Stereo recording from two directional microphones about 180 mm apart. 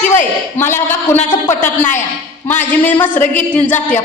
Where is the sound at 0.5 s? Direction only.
15° left (ahead or behind).